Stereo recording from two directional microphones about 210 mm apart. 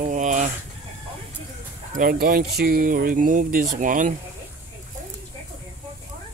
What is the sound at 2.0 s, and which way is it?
Speech, 45° right (ahead or behind).